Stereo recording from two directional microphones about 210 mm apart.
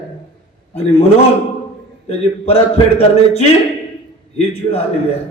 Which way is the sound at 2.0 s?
30° left (ahead or behind).